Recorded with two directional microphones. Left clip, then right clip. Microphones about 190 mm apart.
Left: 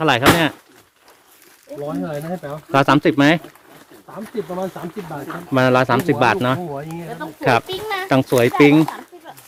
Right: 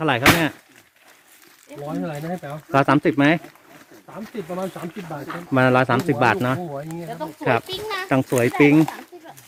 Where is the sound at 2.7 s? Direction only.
5° left (ahead or behind).